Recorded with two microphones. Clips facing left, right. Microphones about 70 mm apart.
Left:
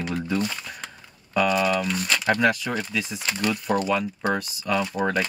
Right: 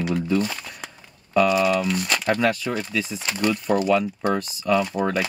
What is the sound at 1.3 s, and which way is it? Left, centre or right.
Speech, centre.